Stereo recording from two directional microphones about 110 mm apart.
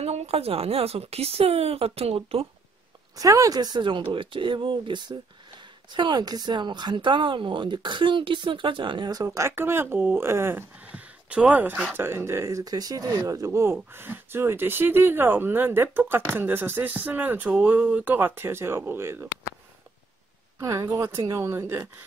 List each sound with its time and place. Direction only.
0.0 s speech: 70° right (ahead or behind)
3.2 s speech: 30° right (ahead or behind)
10.9 s a sound: 10° right (ahead or behind)
11.9 s speech: 20° right (ahead or behind)
20.5 s speech: 30° right (ahead or behind)